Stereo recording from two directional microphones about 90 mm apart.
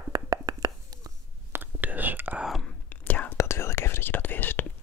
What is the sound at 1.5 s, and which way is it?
Whispering, 20° right (ahead or behind).